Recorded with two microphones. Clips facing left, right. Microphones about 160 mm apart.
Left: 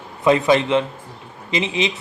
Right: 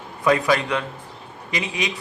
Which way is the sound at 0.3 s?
25° left (ahead or behind).